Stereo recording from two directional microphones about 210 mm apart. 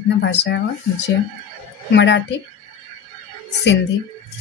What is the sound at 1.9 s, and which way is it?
Speech, 55° left (ahead or behind).